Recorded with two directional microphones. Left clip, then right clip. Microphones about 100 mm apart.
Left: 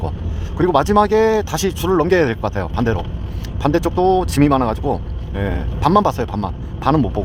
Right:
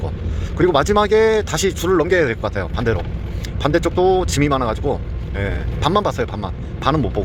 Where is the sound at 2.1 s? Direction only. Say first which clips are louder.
Left 1 dB; 35° left (ahead or behind).